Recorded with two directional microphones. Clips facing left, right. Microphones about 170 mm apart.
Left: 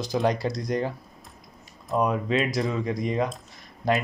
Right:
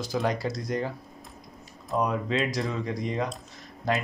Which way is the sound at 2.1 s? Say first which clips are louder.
Left 3 dB; 15° left (ahead or behind).